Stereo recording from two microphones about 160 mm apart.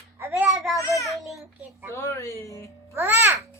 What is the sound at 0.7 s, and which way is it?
Speech, 20° left (ahead or behind).